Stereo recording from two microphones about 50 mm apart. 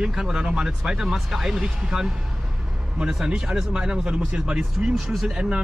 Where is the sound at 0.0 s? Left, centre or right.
Centre.